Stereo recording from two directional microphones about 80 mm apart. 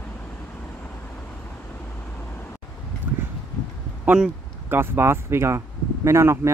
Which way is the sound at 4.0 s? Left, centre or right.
Centre.